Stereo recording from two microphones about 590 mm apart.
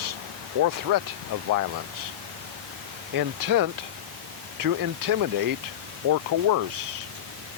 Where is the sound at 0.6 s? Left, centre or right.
Right.